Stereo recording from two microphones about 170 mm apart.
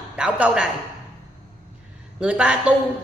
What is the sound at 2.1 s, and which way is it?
Speech, 5° right (ahead or behind).